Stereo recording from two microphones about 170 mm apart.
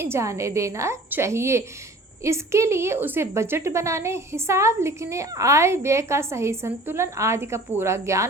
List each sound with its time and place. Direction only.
0.0 s a woman's voice: 15° right (ahead or behind)